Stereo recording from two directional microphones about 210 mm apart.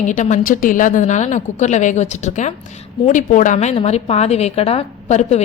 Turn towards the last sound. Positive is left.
turn(degrees=30)  # may be behind; listen again after turning